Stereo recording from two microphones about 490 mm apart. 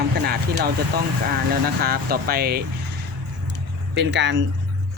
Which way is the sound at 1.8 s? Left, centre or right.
Centre.